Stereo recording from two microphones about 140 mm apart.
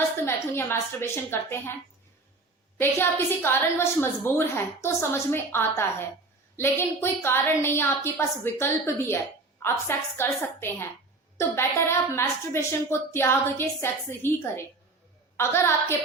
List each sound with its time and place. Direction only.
0.3 s a woman's voice: 15° left (ahead or behind)
2.7 s a woman's voice: 15° left (ahead or behind)